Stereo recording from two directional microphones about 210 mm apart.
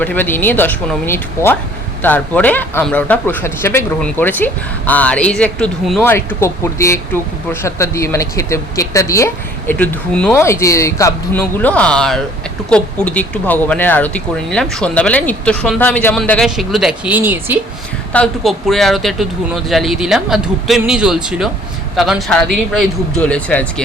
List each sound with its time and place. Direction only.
0.0 s speech: 10° left (ahead or behind)
6.1 s speech: 15° left (ahead or behind); by 17.6 s 10° right (ahead or behind)
18.1 s speech: 5° left (ahead or behind)